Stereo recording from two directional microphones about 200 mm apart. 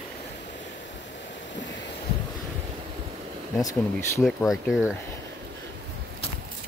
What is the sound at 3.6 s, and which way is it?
Speech, 15° left (ahead or behind).